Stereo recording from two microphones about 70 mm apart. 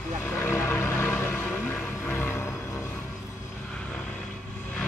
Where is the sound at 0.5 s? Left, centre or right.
Left.